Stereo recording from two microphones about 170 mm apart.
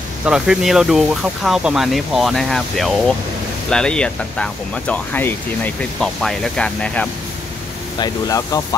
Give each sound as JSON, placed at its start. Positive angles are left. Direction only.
{"t": 0.2, "sound": "speech", "side_deg": -5}
{"t": 8.0, "sound": "speech", "side_deg": 20}